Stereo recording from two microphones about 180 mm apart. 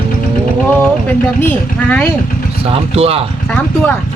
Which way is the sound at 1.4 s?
10° left (ahead or behind).